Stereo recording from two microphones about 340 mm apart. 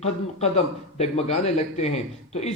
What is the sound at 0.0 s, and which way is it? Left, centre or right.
A man's voice, centre.